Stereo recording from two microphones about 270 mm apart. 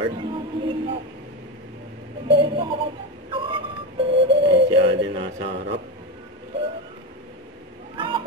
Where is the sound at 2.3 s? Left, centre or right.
Centre.